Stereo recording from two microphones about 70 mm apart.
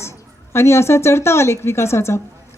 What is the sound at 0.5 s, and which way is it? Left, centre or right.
Speech, left.